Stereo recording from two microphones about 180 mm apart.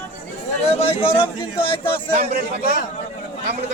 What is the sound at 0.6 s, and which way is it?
Speech, 30° left (ahead or behind).